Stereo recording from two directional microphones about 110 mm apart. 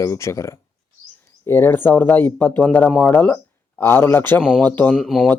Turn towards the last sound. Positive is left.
turn(degrees=5)  # may be behind; listen again after turning